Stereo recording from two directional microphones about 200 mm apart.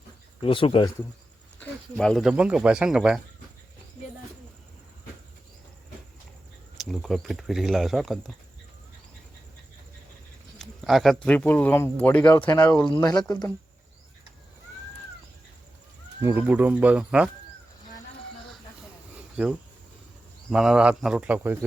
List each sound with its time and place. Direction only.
0.4 s speech: 25° left (ahead or behind)
1.5 s speech: 5° left (ahead or behind)
6.7 s speech: centre (ahead or behind)
10.6 s speech: centre (ahead or behind)
13.0 s speech: 20° left (ahead or behind)
16.2 s speech: 10° right (ahead or behind)
19.1 s a sound: 5° right (ahead or behind)
20.5 s speech: 5° right (ahead or behind)